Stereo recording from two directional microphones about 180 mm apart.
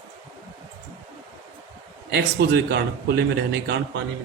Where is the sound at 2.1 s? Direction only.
60° right (ahead or behind).